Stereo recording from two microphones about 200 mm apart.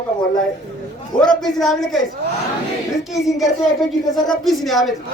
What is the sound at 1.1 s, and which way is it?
Speech, 5° left (ahead or behind).